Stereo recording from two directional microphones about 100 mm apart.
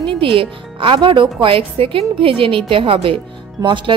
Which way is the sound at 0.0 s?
60° right (ahead or behind).